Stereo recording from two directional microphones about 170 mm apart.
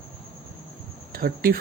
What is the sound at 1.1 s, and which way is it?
Speech, 60° right (ahead or behind).